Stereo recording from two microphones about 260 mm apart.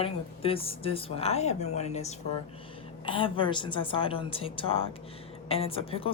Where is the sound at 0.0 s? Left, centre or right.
Left.